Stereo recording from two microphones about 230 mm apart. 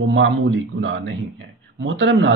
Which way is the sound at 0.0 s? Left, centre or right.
Right.